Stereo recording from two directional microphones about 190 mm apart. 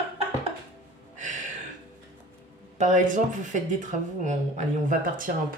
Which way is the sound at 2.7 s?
40° right (ahead or behind).